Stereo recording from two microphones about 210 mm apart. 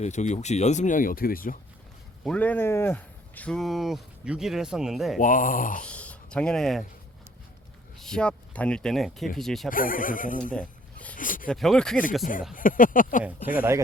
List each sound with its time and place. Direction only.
0.0 s speech: 35° left (ahead or behind)
2.2 s speech: 5° left (ahead or behind)
5.2 s speech: 40° left (ahead or behind)
5.8 s speech: 5° left (ahead or behind)
7.9 s speech: 5° left (ahead or behind)
9.6 s speech: 40° left (ahead or behind)
11.2 s a sound: 40° left (ahead or behind)
11.4 s speech: centre (ahead or behind)
12.2 s speech: 40° left (ahead or behind)
13.6 s speech: 15° right (ahead or behind)